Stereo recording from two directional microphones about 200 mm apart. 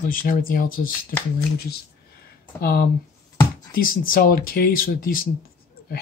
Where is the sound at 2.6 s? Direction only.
50° left (ahead or behind).